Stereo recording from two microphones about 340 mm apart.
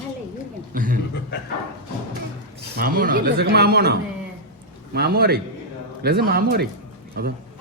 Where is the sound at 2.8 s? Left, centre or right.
Right.